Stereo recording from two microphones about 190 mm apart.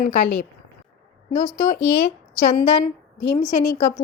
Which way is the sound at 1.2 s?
25° left (ahead or behind).